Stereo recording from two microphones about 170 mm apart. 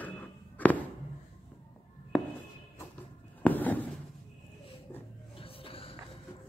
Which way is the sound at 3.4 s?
10° left (ahead or behind).